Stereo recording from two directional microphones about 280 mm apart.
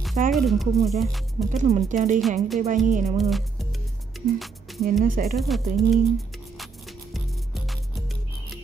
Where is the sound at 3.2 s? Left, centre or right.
Centre.